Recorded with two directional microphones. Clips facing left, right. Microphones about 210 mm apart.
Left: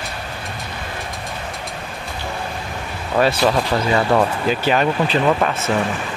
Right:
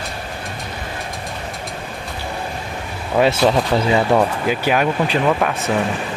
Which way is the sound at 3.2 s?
20° right (ahead or behind).